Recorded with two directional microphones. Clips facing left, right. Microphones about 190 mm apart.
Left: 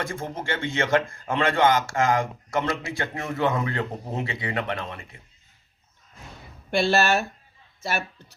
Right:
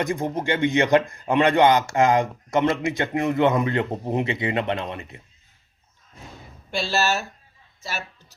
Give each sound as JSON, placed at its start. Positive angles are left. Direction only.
{"t": 0.0, "sound": "a man's voice", "side_deg": -20}
{"t": 6.7, "sound": "speech", "side_deg": 55}